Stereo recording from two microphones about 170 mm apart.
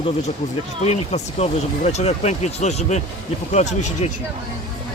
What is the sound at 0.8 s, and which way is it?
Speech, 40° left (ahead or behind).